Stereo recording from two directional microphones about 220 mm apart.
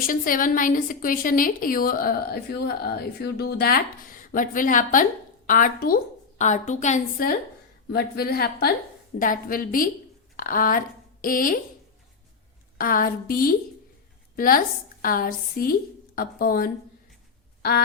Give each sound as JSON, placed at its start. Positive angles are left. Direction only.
{"t": 0.1, "sound": "a woman's voice", "side_deg": 40}
{"t": 12.7, "sound": "a woman's voice", "side_deg": 40}
{"t": 17.6, "sound": "quack", "side_deg": 45}